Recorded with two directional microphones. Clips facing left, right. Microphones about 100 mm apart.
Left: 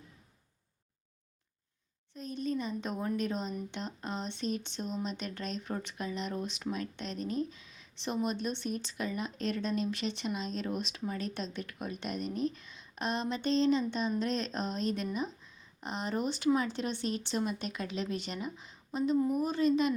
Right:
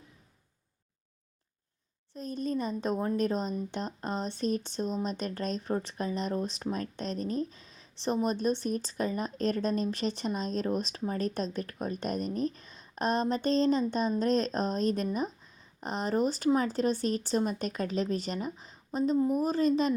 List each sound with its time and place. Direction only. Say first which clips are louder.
2.1 s speech: right 2 dB; 40° right (ahead or behind)